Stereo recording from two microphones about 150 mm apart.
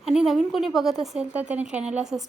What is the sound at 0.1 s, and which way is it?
Speech, 5° right (ahead or behind).